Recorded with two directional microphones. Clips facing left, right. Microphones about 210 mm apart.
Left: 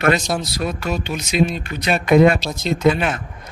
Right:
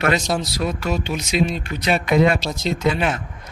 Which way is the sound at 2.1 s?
50° left (ahead or behind).